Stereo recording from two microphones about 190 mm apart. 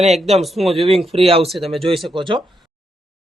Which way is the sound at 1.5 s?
Centre (ahead or behind).